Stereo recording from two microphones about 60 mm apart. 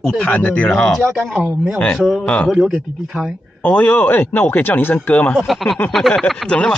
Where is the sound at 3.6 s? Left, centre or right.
Left.